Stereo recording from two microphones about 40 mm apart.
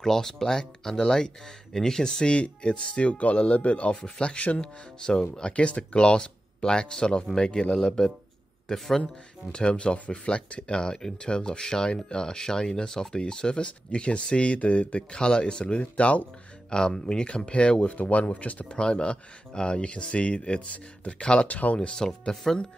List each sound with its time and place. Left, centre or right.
0.0 s speech: centre
2.2 s speech: left
3.9 s speech: left
8.7 s speech: centre
9.0 s speech: left
16.7 s speech: left
18.7 s speech: left
21.5 s speech: left
21.9 s speech: centre
22.3 s speech: centre